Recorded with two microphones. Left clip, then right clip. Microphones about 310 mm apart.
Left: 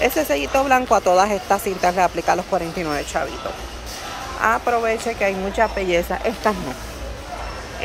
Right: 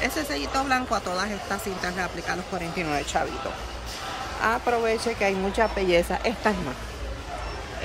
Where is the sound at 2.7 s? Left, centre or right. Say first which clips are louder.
Left 3 dB; centre.